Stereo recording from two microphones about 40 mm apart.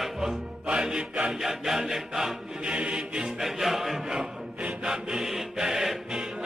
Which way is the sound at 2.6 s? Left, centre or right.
Right.